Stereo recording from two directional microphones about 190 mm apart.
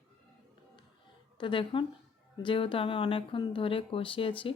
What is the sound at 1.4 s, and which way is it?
A woman's voice, 25° left (ahead or behind).